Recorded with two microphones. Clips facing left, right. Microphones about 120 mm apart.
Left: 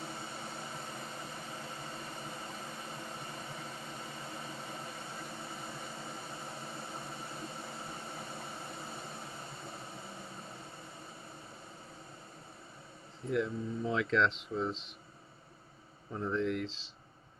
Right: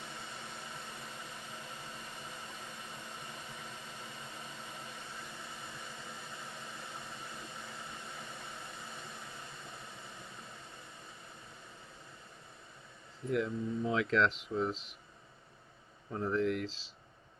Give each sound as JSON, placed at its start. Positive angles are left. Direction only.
{"t": 0.0, "sound": "vehicle", "side_deg": 35}
{"t": 13.3, "sound": "speech", "side_deg": 0}
{"t": 16.1, "sound": "speech", "side_deg": 0}